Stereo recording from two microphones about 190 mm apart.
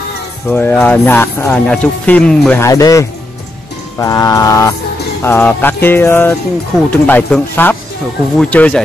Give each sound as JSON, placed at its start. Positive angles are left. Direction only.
{"t": 0.5, "sound": "speech", "side_deg": 10}
{"t": 2.6, "sound": "speech", "side_deg": 20}